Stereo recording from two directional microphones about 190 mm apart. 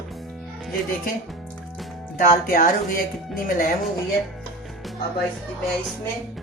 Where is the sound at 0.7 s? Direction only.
50° left (ahead or behind).